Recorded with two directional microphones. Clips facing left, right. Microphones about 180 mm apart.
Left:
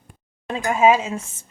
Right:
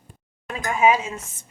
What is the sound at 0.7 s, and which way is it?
Speech, 25° left (ahead or behind).